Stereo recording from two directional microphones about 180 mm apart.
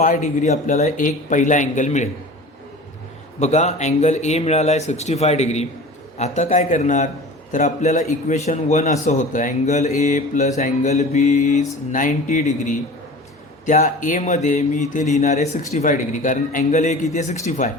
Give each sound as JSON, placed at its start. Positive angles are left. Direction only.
{"t": 0.0, "sound": "speech", "side_deg": 45}
{"t": 3.4, "sound": "a man's voice", "side_deg": 40}